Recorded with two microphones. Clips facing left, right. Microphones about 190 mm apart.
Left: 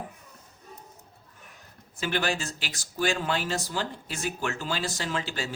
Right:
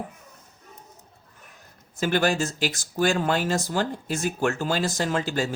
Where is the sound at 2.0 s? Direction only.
45° right (ahead or behind).